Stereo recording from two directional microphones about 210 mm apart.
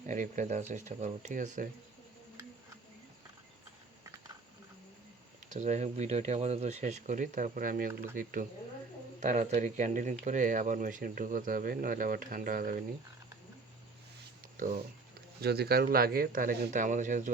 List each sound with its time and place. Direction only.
0.1 s speech: 35° right (ahead or behind)
5.5 s speech: 35° right (ahead or behind)
14.5 s speech: 40° right (ahead or behind)